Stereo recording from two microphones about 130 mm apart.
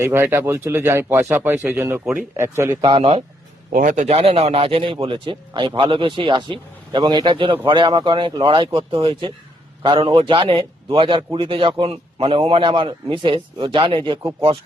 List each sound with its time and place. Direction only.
0.0 s speech: 20° right (ahead or behind)
2.8 s a man's voice: 45° right (ahead or behind)
3.7 s a man's voice: 90° right
4.0 s a man's voice: 50° right (ahead or behind)